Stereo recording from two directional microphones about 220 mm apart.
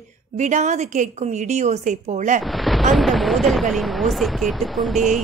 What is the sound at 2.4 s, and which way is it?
Thunder, centre (ahead or behind).